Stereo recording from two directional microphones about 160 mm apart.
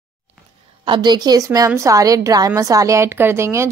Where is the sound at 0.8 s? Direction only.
30° right (ahead or behind).